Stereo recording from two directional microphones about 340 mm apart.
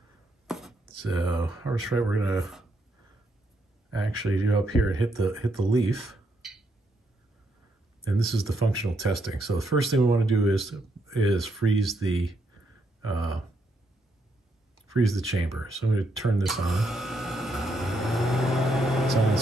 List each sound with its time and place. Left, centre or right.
0.5 s writing: centre
1.4 s speech: centre
4.0 s speech: centre
8.2 s speech: centre
15.0 s a sound: centre